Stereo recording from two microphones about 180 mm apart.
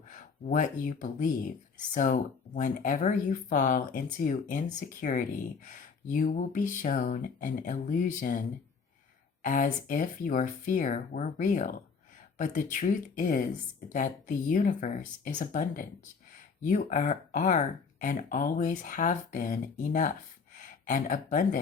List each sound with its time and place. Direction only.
0.1 s speech: 45° left (ahead or behind)